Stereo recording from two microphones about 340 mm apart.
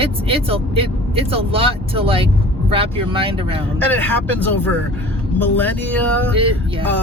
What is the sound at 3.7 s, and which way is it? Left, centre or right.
Speech, centre.